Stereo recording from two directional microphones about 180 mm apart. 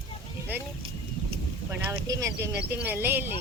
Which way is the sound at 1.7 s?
15° right (ahead or behind).